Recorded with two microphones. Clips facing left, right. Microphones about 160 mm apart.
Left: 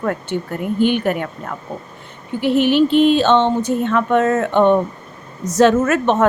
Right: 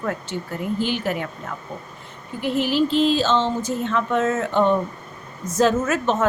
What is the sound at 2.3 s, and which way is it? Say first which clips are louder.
A woman's voice: left 6 dB; 70° left (ahead or behind).